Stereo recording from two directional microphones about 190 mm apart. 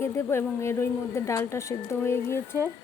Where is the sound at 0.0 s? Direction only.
15° left (ahead or behind).